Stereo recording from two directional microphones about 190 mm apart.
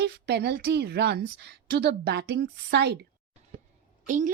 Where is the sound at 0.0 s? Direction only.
60° right (ahead or behind).